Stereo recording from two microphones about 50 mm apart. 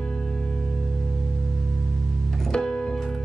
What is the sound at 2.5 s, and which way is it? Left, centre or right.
Keyboard, centre.